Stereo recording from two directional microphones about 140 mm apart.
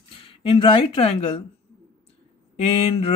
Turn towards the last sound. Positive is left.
turn(degrees=45)  # may be behind; listen again after turning